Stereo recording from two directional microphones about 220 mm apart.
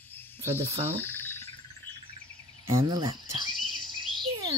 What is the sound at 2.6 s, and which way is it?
Speech, 15° right (ahead or behind).